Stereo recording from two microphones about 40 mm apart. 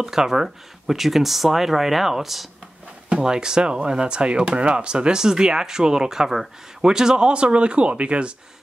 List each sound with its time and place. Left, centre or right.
0.0 s speech: centre
3.2 s speech: centre